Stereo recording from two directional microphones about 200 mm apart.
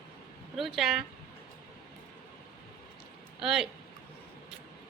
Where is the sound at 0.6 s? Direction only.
Centre (ahead or behind).